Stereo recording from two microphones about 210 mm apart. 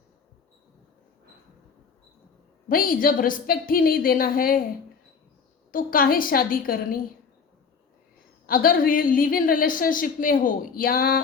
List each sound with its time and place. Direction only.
2.6 s a woman's voice: 45° left (ahead or behind)
5.7 s a woman's voice: 40° left (ahead or behind)
8.4 s a woman's voice: 40° left (ahead or behind)